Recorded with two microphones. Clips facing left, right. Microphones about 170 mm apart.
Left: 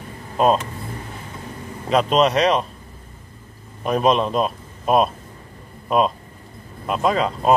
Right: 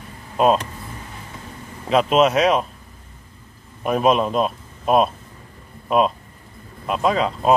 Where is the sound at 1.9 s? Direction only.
5° right (ahead or behind).